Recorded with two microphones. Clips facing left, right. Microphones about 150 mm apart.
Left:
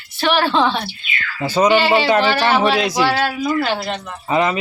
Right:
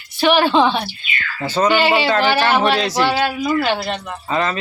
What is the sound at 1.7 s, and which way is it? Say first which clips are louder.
A woman's voice: left 1 dB; centre (ahead or behind).